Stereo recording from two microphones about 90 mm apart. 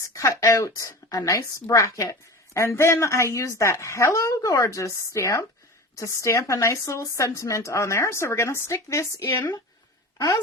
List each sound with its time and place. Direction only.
0.0 s a woman's voice: 35° left (ahead or behind)
10.2 s a woman's voice: 50° left (ahead or behind)